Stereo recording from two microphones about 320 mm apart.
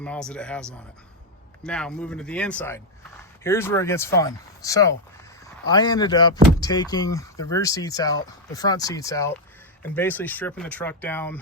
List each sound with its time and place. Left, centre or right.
0.0 s speech: centre